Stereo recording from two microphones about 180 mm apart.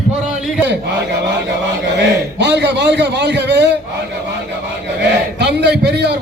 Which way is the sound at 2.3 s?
75° right (ahead or behind).